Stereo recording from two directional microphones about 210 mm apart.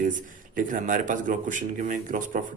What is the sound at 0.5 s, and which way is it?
Speech, 40° right (ahead or behind).